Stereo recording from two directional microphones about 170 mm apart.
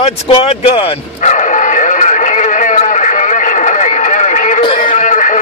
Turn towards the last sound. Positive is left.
turn(degrees=50)  # may be behind; listen again after turning